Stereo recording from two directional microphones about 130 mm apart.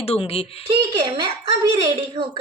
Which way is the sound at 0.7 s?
40° right (ahead or behind).